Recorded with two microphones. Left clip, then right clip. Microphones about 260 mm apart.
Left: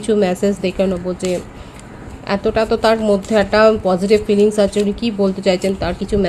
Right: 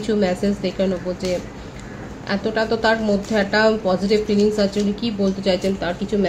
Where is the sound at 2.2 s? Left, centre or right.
Left.